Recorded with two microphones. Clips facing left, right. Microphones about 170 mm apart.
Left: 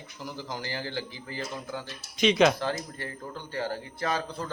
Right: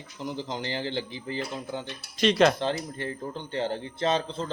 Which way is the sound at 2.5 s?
20° right (ahead or behind).